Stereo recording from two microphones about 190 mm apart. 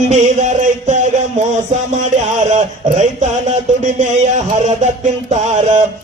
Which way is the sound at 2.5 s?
40° right (ahead or behind).